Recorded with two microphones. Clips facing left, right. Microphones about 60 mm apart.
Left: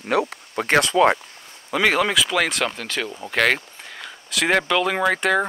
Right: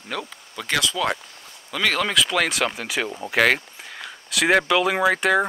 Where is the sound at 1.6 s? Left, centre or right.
Centre.